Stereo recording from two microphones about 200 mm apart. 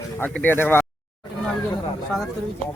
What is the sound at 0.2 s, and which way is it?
Speech, 10° left (ahead or behind).